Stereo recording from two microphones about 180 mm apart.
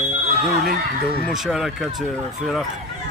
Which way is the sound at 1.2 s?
Centre (ahead or behind).